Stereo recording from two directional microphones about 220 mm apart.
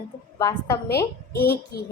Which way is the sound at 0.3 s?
10° left (ahead or behind).